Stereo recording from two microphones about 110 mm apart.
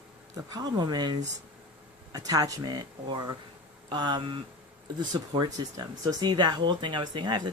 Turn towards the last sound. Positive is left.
turn(degrees=-45)  # may be behind; listen again after turning